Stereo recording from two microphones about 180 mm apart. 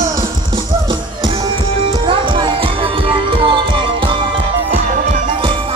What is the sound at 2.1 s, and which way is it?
Music, 25° right (ahead or behind).